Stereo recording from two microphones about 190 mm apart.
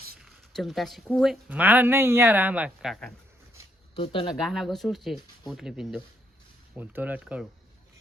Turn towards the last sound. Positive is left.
turn(degrees=-5)  # may be behind; listen again after turning